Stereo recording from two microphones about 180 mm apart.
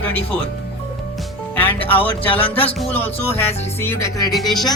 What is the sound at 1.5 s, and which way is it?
Music, 10° left (ahead or behind).